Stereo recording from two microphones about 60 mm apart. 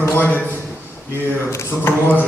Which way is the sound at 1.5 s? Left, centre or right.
Left.